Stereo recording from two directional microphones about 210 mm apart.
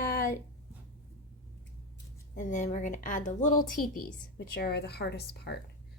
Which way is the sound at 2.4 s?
35° left (ahead or behind).